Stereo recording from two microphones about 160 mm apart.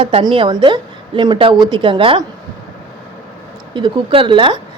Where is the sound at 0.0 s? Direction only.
35° right (ahead or behind).